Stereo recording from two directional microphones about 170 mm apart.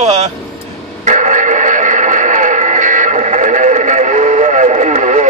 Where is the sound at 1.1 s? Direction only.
45° right (ahead or behind).